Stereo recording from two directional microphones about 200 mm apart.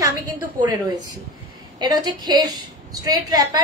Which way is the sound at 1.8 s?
20° right (ahead or behind).